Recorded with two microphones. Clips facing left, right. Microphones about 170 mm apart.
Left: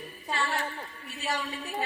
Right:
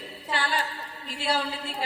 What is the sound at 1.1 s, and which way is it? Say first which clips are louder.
Speech: right 5 dB; 75° right (ahead or behind).